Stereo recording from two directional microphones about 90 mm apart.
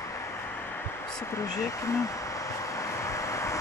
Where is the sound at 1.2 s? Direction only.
35° left (ahead or behind).